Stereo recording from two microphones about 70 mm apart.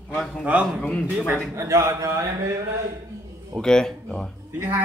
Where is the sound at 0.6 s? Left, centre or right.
Centre.